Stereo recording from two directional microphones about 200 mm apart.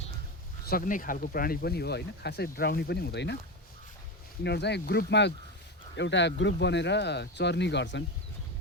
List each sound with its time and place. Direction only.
0.7 s speech: 40° left (ahead or behind); by 3.3 s 55° left (ahead or behind)
4.4 s speech: 55° left (ahead or behind)